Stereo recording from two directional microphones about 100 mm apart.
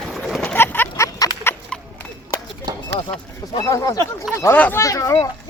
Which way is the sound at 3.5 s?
35° left (ahead or behind).